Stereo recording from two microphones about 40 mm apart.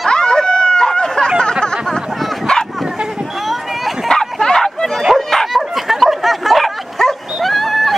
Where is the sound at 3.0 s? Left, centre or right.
Centre.